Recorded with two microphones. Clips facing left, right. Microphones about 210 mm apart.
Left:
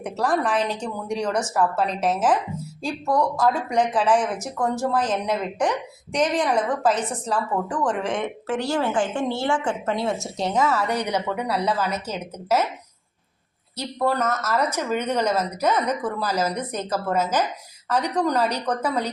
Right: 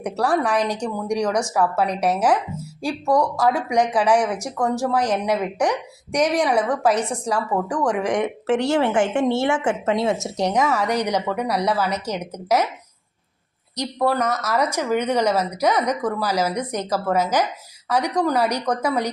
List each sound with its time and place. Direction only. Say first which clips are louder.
0.0 s a woman's voice: right 2 dB; 10° right (ahead or behind)
13.7 s a woman's voice: right 2 dB; 10° right (ahead or behind)